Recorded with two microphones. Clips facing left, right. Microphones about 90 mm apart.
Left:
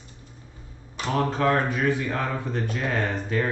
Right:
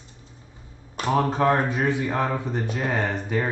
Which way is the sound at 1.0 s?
25° right (ahead or behind).